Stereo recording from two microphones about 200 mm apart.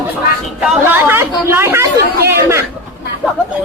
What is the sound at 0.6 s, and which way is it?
A man's voice, 10° right (ahead or behind).